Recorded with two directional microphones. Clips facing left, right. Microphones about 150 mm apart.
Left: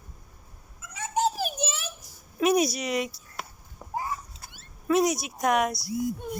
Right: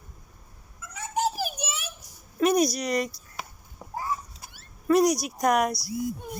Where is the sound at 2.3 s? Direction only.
5° left (ahead or behind).